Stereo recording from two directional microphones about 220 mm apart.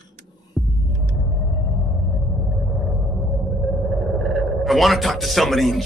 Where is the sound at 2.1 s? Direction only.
Centre (ahead or behind).